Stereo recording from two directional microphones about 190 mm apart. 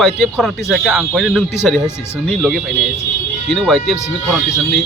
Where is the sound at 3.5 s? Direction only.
Centre (ahead or behind).